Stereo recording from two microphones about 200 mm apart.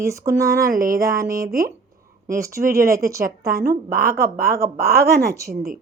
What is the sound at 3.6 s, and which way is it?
Speech, 50° right (ahead or behind).